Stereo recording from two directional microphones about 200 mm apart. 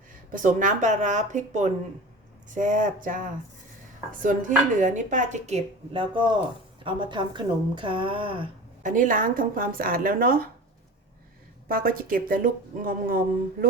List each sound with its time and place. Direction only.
0.3 s dishes: 40° right (ahead or behind); by 6.3 s 25° right (ahead or behind)
6.8 s a woman's voice: 25° right (ahead or behind)
8.8 s speech: 40° right (ahead or behind)
11.7 s speech: 45° right (ahead or behind)